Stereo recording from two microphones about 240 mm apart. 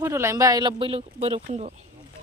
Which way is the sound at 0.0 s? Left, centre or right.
Centre.